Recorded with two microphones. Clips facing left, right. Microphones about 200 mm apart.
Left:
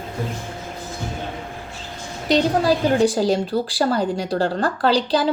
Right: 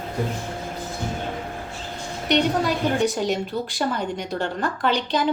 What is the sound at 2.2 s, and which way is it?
A woman's voice, 30° left (ahead or behind).